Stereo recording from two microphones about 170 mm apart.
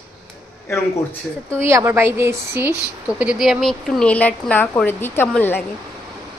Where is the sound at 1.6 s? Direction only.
15° right (ahead or behind); by 5.6 s 10° left (ahead or behind).